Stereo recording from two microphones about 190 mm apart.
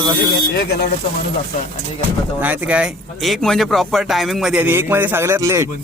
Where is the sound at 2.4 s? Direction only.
10° right (ahead or behind).